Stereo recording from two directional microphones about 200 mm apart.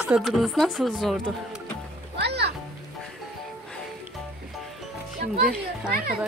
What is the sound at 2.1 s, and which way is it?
Music, 55° right (ahead or behind).